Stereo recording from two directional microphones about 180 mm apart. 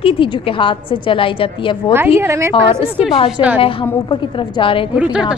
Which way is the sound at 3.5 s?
30° left (ahead or behind).